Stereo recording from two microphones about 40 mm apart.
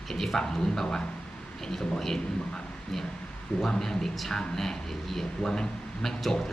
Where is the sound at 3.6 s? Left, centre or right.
Centre.